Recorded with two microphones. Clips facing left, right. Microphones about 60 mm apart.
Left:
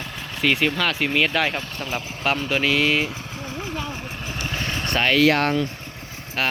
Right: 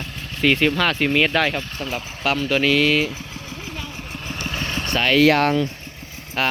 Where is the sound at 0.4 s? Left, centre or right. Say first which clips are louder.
Right 3 dB; centre.